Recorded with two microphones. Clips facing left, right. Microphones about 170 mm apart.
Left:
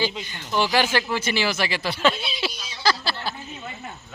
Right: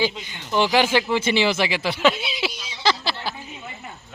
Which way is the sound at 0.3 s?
20° right (ahead or behind).